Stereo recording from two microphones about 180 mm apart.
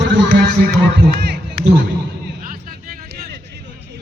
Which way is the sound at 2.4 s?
50° right (ahead or behind).